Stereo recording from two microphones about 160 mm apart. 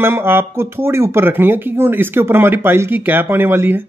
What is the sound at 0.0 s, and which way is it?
Speech, 15° right (ahead or behind).